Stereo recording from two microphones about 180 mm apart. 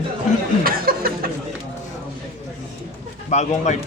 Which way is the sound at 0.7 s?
55° right (ahead or behind).